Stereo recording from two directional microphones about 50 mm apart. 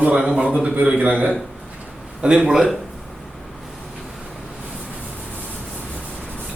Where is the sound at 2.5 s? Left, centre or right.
Centre.